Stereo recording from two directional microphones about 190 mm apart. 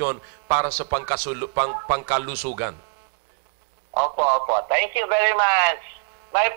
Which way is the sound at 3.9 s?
30° right (ahead or behind).